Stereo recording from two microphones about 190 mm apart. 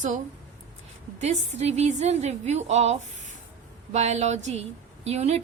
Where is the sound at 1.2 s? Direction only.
35° right (ahead or behind).